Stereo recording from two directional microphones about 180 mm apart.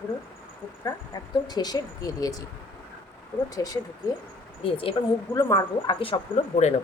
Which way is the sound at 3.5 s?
20° left (ahead or behind).